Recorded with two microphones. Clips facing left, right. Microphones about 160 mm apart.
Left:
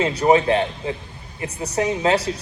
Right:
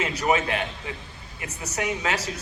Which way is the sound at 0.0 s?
35° left (ahead or behind).